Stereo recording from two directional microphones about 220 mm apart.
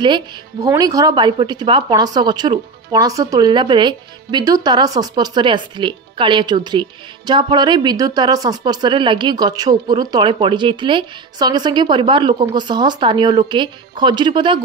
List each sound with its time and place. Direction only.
0.0 s speech: 20° right (ahead or behind)